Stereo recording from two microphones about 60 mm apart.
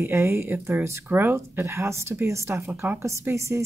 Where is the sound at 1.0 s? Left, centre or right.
Right.